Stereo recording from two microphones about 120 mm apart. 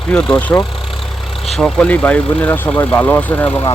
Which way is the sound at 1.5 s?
5° left (ahead or behind).